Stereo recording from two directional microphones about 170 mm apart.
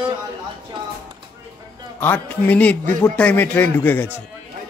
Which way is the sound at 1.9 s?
10° left (ahead or behind).